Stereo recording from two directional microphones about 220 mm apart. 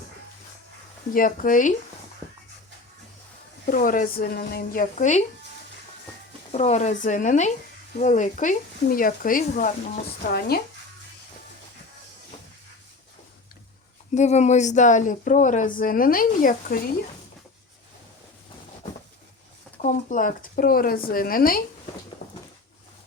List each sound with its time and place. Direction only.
1.1 s speech: 40° left (ahead or behind)
3.7 s speech: 40° left (ahead or behind)
6.5 s speech: 30° left (ahead or behind)
14.2 s speech: 30° left (ahead or behind)
19.8 s speech: 35° left (ahead or behind)